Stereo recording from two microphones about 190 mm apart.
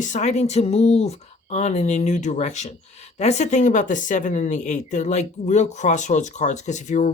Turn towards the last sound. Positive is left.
turn(degrees=40)  # may be behind; listen again after turning